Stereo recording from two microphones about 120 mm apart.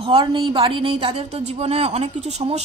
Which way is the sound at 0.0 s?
45° right (ahead or behind).